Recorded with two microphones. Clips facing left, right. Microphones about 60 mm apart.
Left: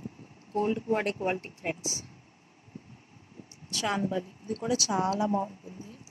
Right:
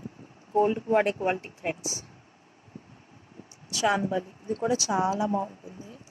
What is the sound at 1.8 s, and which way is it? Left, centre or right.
Speech, right.